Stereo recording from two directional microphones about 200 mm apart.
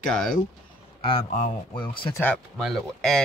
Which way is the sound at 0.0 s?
5° left (ahead or behind).